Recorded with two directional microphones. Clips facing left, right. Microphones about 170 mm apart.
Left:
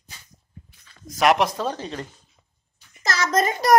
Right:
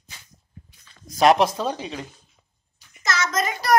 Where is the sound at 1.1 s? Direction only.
30° right (ahead or behind).